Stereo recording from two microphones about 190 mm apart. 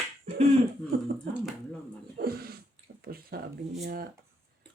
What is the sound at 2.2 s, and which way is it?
Speech, 55° right (ahead or behind).